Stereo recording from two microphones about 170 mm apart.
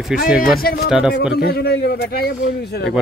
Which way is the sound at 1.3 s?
70° left (ahead or behind).